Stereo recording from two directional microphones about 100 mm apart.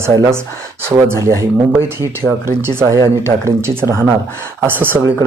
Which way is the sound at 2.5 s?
25° right (ahead or behind).